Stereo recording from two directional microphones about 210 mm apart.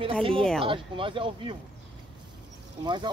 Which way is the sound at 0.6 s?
25° right (ahead or behind).